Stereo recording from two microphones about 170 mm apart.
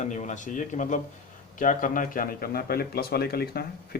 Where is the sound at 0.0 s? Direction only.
45° left (ahead or behind).